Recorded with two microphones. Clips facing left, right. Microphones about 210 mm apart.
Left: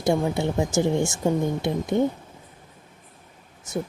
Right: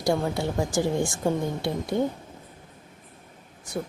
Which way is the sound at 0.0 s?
20° left (ahead or behind).